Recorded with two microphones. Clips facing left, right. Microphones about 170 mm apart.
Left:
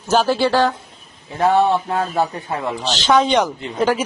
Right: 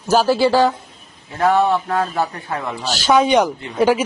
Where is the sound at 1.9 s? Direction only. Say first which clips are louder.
Even; 30° left (ahead or behind).